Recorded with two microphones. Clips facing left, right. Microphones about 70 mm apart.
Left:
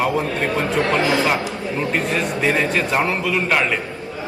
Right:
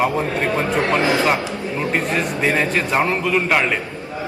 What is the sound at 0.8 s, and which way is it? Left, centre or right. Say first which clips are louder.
Speech: right 1 dB; right.